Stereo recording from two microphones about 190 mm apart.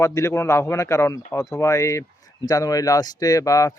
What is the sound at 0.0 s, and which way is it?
Speech, 15° left (ahead or behind).